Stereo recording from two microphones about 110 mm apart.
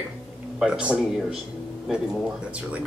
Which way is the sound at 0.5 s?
5° right (ahead or behind).